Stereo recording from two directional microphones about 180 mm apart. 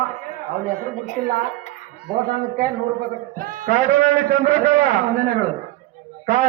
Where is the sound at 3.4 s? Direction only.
50° right (ahead or behind).